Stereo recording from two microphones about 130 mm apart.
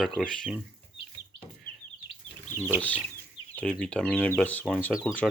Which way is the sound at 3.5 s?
5° left (ahead or behind).